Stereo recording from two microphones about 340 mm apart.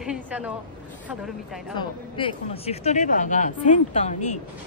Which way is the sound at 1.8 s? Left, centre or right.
Centre.